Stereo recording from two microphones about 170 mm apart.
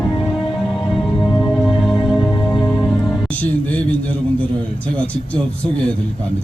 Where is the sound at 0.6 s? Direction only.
Centre (ahead or behind).